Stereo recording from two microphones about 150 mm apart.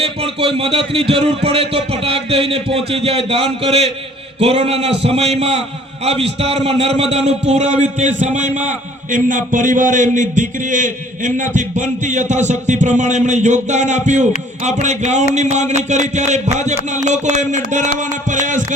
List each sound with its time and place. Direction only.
0.0 s a man's voice: 40° right (ahead or behind); by 18.6 s 55° right (ahead or behind)